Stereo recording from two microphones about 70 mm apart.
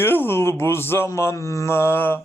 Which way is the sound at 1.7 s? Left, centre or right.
Left.